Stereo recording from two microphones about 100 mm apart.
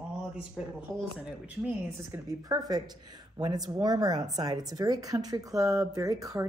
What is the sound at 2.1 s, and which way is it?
Speech, 20° right (ahead or behind).